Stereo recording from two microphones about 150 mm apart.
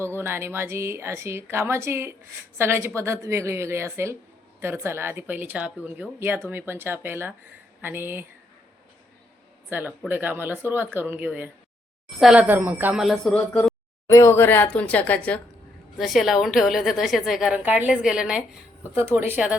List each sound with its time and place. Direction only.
0.0 s a woman's voice: 15° right (ahead or behind)
9.6 s a woman's voice: 10° right (ahead or behind); by 13.7 s 5° left (ahead or behind)
14.1 s speech: 20° left (ahead or behind)
16.0 s a woman's voice: centre (ahead or behind)